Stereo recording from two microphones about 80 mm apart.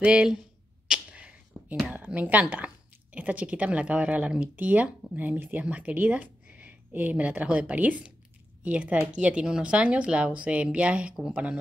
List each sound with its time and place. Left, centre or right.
0.0 s speech: centre
0.8 s a sound: centre
1.9 s speech: centre